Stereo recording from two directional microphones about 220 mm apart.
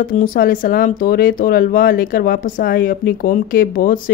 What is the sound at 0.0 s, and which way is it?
Speech, 40° left (ahead or behind).